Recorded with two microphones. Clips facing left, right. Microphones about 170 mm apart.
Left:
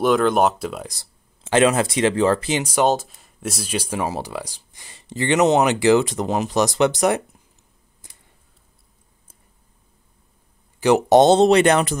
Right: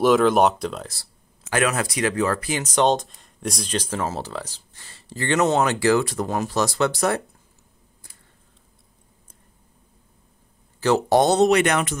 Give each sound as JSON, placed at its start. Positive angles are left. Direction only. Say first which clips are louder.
{"t": 0.0, "sound": "speech", "louder": "right 1 dB", "side_deg": 0}
{"t": 1.4, "sound": "speech", "louder": "left 6 dB", "side_deg": 25}
{"t": 2.6, "sound": "speech", "louder": "left 1 dB", "side_deg": 10}
{"t": 10.8, "sound": "speech", "louder": "left 4 dB", "side_deg": 15}